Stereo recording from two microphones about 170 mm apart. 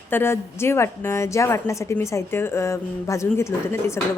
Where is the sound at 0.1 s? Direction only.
15° left (ahead or behind).